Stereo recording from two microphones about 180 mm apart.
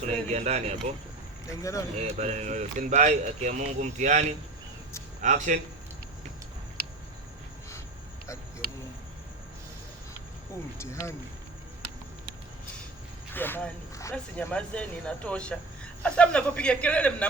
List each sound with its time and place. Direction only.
0.0 s speech: 40° right (ahead or behind)
1.5 s speech: 15° left (ahead or behind)
2.0 s speech: 40° right (ahead or behind)
13.3 s speech: 10° left (ahead or behind)